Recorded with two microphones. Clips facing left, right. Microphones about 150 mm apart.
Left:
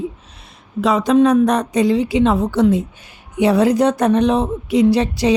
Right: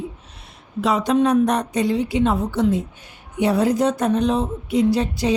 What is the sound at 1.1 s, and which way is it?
A woman's voice, 90° left.